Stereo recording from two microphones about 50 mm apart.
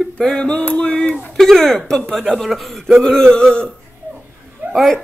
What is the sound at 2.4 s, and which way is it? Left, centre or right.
A man's voice, centre.